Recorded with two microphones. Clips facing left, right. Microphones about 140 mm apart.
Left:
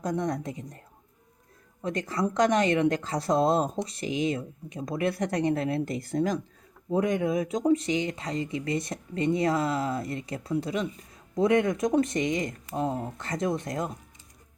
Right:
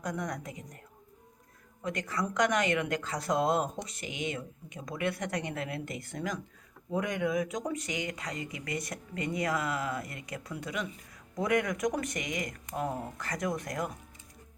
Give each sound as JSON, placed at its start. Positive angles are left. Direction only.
{"t": 0.0, "sound": "speech", "side_deg": 30}
{"t": 1.8, "sound": "speech", "side_deg": 30}